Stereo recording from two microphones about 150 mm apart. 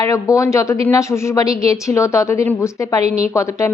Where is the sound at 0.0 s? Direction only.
20° left (ahead or behind).